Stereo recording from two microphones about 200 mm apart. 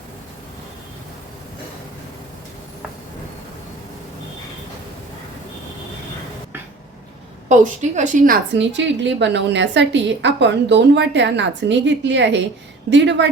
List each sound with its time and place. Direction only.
7.4 s a woman's voice: 35° right (ahead or behind)
8.5 s a woman's voice: 65° right (ahead or behind)